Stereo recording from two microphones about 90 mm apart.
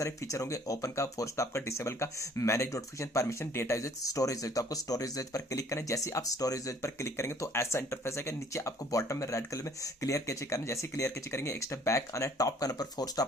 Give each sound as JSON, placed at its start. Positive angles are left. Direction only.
{"t": 0.0, "sound": "speech", "side_deg": 35}